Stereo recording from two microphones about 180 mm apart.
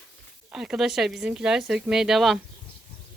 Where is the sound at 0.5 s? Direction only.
5° right (ahead or behind).